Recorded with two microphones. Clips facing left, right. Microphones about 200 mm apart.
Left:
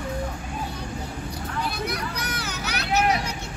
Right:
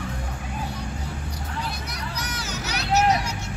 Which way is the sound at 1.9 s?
55° left (ahead or behind).